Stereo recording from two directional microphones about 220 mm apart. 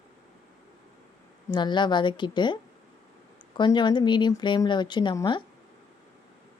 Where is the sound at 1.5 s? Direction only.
20° left (ahead or behind).